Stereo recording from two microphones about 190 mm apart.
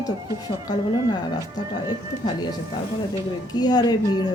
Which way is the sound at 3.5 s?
20° left (ahead or behind).